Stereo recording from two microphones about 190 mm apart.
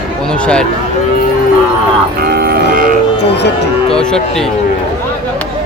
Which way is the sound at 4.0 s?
5° left (ahead or behind).